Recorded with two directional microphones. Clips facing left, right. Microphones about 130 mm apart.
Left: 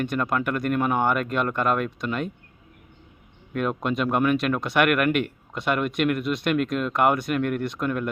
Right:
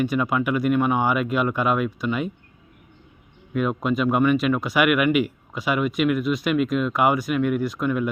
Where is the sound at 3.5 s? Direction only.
Centre (ahead or behind).